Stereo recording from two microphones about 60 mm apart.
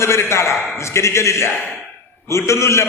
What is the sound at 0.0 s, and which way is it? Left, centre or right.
A man's voice, left.